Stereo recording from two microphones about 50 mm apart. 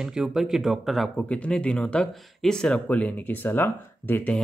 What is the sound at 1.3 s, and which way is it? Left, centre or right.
Speech, left.